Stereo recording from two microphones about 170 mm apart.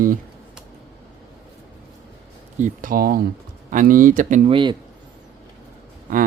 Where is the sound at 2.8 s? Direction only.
55° right (ahead or behind).